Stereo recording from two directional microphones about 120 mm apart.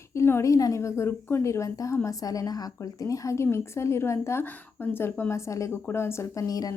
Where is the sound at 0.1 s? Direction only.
20° left (ahead or behind).